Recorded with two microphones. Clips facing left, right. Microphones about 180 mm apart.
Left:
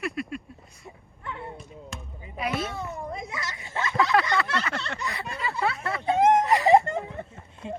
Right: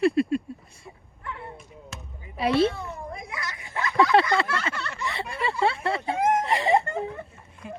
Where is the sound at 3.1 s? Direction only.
25° left (ahead or behind).